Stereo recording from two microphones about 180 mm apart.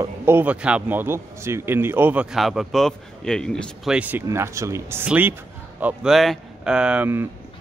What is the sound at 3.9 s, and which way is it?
Speech, 10° right (ahead or behind).